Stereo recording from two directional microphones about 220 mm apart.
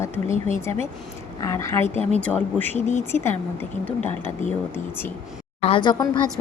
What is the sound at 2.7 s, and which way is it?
Speech, 30° left (ahead or behind).